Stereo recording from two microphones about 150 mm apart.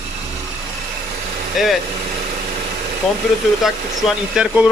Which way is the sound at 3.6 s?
5° right (ahead or behind).